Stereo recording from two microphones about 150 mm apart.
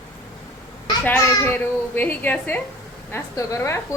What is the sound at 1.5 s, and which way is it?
A woman's voice, 10° left (ahead or behind).